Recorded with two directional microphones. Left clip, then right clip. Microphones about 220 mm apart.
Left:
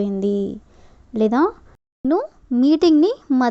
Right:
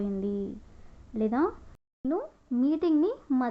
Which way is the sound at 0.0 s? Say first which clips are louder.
Left 11 dB; 35° left (ahead or behind).